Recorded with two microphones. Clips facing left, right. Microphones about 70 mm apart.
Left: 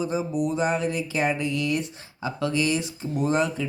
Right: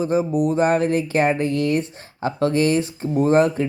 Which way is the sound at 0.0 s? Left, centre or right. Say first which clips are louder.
Right 6 dB; right.